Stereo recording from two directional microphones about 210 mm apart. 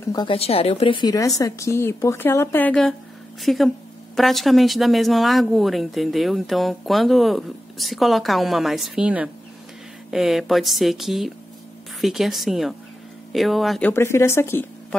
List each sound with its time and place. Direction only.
0.1 s a woman's voice: 25° left (ahead or behind)